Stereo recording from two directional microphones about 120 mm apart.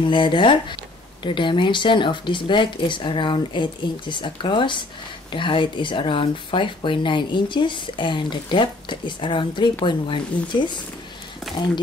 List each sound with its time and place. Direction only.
0.0 s speech: 45° left (ahead or behind)